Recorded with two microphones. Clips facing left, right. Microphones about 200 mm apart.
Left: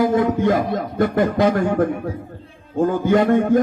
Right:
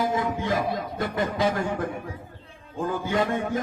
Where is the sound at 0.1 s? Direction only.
50° left (ahead or behind).